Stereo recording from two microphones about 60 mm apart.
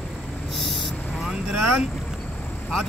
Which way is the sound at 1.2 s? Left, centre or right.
Centre.